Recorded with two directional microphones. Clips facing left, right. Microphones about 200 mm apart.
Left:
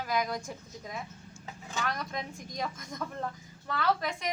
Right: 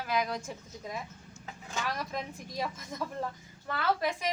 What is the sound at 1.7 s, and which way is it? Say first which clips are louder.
A woman's voice: even; 5° right (ahead or behind).